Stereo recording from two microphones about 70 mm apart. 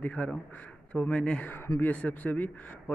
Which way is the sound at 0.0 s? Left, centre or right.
Left.